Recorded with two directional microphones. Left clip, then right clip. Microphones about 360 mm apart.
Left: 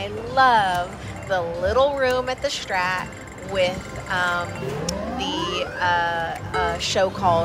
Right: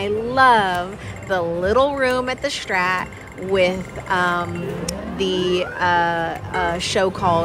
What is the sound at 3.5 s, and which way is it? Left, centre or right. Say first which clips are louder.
Speech: right 4 dB; centre.